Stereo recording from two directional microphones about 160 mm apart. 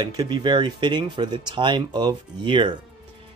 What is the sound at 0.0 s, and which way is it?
Speech, 25° right (ahead or behind).